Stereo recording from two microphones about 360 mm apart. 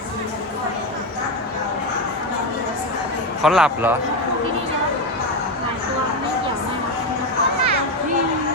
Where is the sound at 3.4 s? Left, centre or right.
Centre.